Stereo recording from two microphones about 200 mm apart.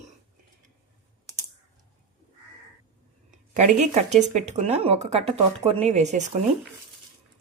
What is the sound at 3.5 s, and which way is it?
Speech, 35° right (ahead or behind).